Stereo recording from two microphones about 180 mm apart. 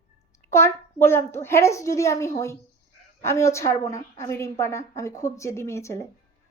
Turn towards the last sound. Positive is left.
turn(degrees=15)  # may be behind; listen again after turning